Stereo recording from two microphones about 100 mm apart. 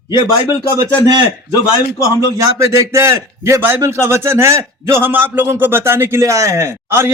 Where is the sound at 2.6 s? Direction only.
30° right (ahead or behind).